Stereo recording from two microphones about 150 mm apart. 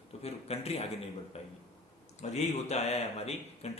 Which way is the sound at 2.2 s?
50° left (ahead or behind).